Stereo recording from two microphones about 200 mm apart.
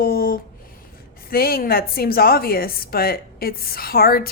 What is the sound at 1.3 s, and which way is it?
A woman's voice, 50° left (ahead or behind).